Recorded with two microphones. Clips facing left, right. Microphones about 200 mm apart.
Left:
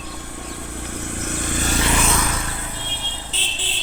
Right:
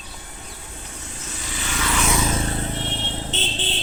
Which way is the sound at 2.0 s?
15° right (ahead or behind).